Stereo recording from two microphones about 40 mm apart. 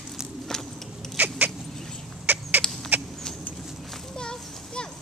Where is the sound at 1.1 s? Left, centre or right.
Right.